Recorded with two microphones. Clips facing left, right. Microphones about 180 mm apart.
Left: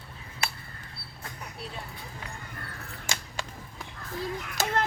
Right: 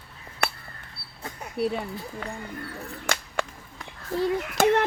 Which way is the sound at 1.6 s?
65° right (ahead or behind).